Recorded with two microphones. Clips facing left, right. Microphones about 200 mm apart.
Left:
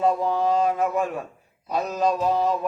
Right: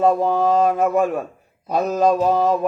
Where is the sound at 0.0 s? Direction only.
50° right (ahead or behind).